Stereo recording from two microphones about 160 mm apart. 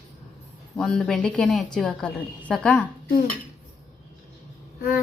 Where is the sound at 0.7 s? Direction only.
5° left (ahead or behind).